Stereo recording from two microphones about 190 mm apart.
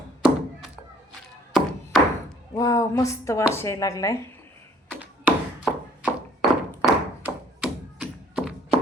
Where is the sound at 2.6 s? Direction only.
15° left (ahead or behind).